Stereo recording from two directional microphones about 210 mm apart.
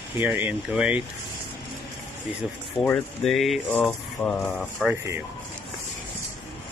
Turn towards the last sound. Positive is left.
turn(degrees=0)  # may be behind; listen again after turning